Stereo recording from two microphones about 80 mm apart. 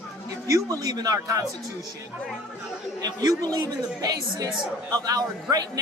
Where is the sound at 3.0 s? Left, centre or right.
Right.